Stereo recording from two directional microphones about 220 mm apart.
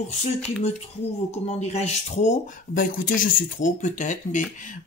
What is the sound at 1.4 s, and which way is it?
Speech, 30° left (ahead or behind).